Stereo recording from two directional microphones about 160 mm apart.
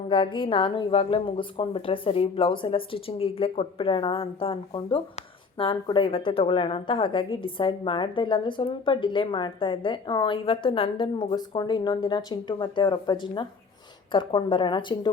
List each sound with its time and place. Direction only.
0.1 s a woman's voice: 30° left (ahead or behind)